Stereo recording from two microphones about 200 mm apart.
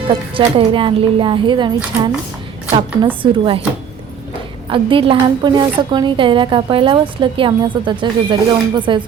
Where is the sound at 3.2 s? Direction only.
20° right (ahead or behind).